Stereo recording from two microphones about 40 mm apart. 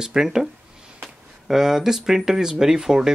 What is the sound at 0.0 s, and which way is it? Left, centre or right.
Speech, centre.